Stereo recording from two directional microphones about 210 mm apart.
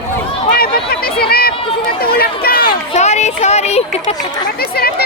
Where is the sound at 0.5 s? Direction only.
45° left (ahead or behind).